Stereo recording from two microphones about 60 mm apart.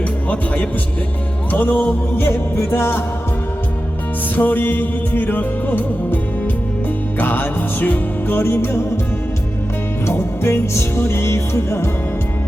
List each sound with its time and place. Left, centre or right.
0.3 s speech: left
1.5 s music: left
4.4 s music: left
7.2 s music: left
10.1 s music: left